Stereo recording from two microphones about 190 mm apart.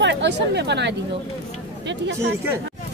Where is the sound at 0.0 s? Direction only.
65° right (ahead or behind).